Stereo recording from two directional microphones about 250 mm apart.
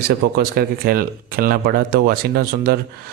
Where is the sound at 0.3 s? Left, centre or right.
Right.